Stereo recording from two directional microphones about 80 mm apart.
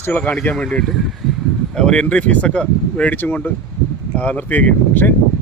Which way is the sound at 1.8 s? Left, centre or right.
Centre.